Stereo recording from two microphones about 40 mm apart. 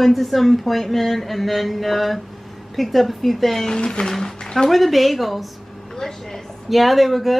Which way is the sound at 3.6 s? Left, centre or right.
Centre.